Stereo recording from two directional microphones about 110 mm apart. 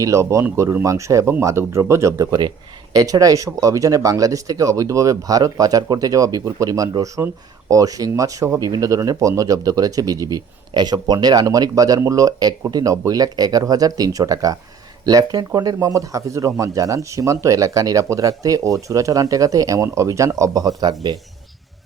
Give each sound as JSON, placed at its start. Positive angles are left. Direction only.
{"t": 0.0, "sound": "speech", "side_deg": -25}